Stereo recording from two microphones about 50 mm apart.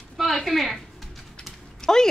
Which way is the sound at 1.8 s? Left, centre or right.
Centre.